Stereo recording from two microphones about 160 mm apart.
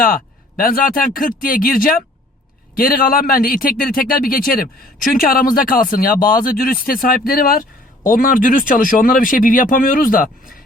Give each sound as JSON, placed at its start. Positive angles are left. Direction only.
{"t": 0.0, "sound": "speech", "side_deg": 65}